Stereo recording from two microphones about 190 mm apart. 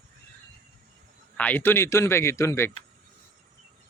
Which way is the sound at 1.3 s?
10° left (ahead or behind).